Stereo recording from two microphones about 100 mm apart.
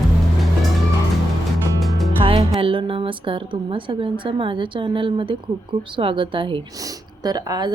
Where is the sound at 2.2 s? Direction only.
65° right (ahead or behind).